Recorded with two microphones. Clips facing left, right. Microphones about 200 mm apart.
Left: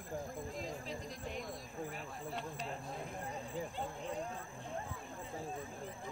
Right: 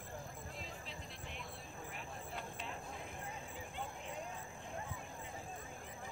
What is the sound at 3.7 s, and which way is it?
Speech, 35° left (ahead or behind).